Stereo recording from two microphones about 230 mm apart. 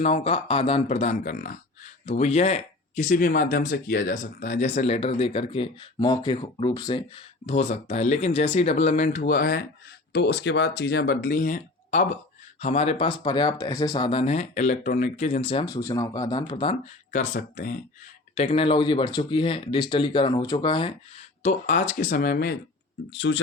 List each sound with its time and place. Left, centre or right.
0.0 s speech: left
15.4 s speech: left
18.3 s speech: left
21.4 s speech: left